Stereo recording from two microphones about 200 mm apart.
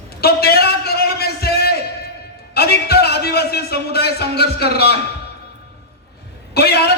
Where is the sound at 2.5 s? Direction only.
50° left (ahead or behind).